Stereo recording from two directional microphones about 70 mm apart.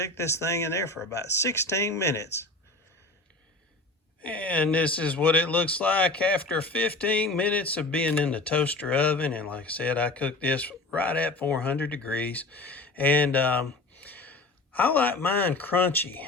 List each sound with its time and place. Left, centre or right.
0.0 s speech: left
4.2 s speech: left